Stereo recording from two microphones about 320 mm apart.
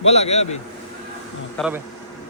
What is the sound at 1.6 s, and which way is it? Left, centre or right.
Speech, centre.